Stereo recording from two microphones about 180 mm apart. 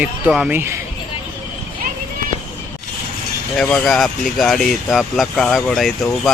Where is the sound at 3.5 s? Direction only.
Centre (ahead or behind).